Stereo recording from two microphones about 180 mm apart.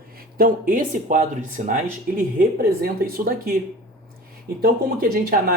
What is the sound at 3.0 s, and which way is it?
Speech, 55° right (ahead or behind).